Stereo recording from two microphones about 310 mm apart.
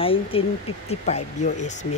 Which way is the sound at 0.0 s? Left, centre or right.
Centre.